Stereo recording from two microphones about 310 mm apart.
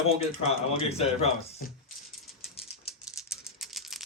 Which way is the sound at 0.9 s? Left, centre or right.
Centre.